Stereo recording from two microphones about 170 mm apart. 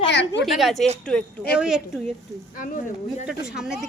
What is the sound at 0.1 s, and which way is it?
Speech, 90° left.